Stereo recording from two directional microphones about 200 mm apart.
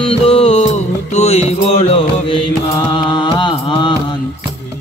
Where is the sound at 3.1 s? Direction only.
20° left (ahead or behind).